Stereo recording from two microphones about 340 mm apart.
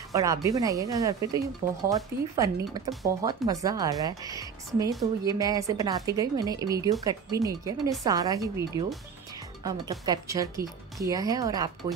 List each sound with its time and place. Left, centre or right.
0.1 s speech: centre
3.3 s speech: centre